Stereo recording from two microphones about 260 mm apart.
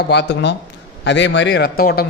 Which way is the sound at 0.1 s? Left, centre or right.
Left.